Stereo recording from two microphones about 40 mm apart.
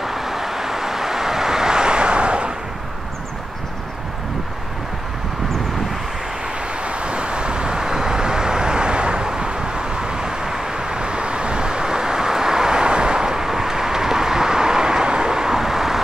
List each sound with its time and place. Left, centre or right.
0.0 s vehicle: centre; by 2.5 s right
6.8 s vehicle: right; by 16.0 s centre